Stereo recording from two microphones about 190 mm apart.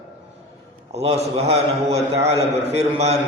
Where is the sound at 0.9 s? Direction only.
35° right (ahead or behind).